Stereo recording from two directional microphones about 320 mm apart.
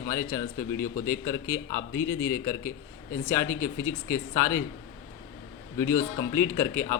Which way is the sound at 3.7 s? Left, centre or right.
Left.